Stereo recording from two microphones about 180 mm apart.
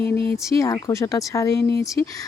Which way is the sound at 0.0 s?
10° left (ahead or behind).